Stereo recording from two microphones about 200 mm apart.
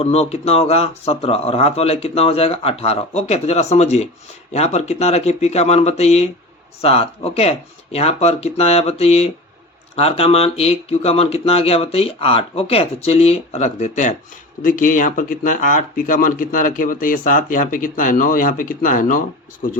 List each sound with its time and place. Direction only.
0.0 s speech: 30° left (ahead or behind)